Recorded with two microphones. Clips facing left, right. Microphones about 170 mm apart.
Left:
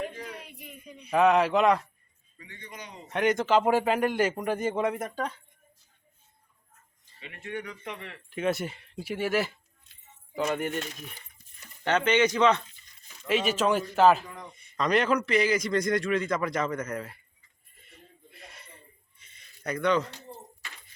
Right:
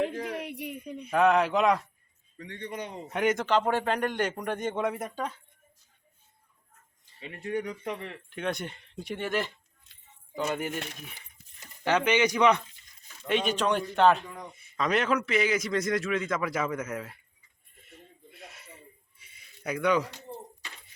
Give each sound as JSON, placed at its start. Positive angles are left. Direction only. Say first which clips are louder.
{"t": 0.0, "sound": "a sound", "louder": "right 6 dB", "side_deg": -80}
{"t": 0.9, "sound": "a sound", "louder": "right 8 dB", "side_deg": -55}
{"t": 1.1, "sound": "a man's voice", "louder": "left 1 dB", "side_deg": 0}
{"t": 2.4, "sound": "a man's voice", "louder": "right 8 dB", "side_deg": -65}
{"t": 3.1, "sound": "a man's voice", "louder": "left 2 dB", "side_deg": -5}
{"t": 7.2, "sound": "speech", "louder": "right 5 dB", "side_deg": -35}
{"t": 8.3, "sound": "a man's voice", "louder": "left 5 dB", "side_deg": 5}
{"t": 11.9, "sound": "speech", "louder": "left 1 dB", "side_deg": -10}
{"t": 13.2, "sound": "a man's voice", "louder": "left 1 dB", "side_deg": 5}
{"t": 17.7, "sound": "a sound", "louder": "right 2 dB", "side_deg": 0}